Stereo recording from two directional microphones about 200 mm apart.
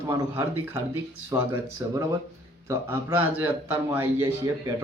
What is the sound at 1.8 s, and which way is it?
Speech, 15° right (ahead or behind).